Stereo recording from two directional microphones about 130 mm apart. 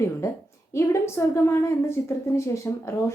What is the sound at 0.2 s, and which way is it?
A woman's voice, 25° left (ahead or behind).